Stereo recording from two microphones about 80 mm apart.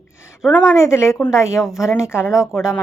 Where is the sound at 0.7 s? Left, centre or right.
Left.